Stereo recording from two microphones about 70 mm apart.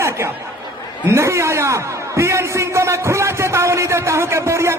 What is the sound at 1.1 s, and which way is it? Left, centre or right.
A man's voice, right.